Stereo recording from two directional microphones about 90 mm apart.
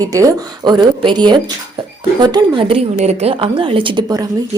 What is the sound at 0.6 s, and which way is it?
A woman's voice, 55° right (ahead or behind).